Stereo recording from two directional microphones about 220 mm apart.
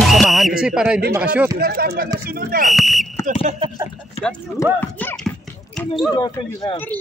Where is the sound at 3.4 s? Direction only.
25° right (ahead or behind).